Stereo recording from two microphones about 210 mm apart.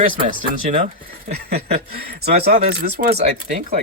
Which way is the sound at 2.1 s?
50° right (ahead or behind).